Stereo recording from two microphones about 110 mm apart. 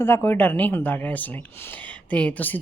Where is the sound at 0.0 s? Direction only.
20° left (ahead or behind).